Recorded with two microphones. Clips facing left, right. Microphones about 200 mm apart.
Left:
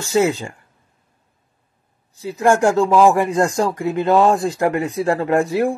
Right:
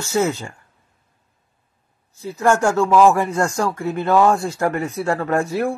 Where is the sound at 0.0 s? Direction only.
15° left (ahead or behind).